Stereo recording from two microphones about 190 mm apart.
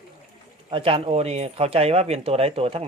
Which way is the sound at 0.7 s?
30° right (ahead or behind).